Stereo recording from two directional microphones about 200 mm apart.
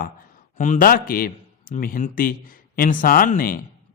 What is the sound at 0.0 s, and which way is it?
A man's voice, 40° left (ahead or behind).